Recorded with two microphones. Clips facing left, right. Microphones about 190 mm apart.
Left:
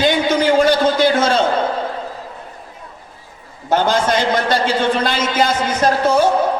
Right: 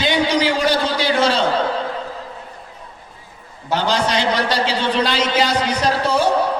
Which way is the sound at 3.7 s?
50° left (ahead or behind).